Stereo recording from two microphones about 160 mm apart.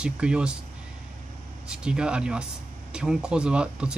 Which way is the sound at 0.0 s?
5° right (ahead or behind).